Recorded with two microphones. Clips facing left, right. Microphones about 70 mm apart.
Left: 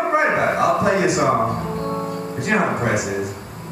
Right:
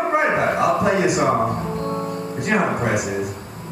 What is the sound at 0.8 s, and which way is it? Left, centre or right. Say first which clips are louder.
Speech: even; centre.